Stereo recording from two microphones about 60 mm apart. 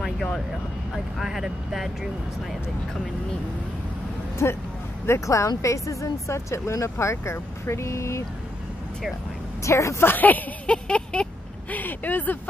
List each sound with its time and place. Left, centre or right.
0.9 s speech: centre
4.4 s speech: left
9.6 s speech: left
10.0 s speech: left
10.9 s a sound: centre
11.7 s speech: left